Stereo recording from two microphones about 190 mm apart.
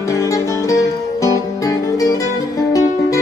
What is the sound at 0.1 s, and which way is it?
Music, 15° left (ahead or behind).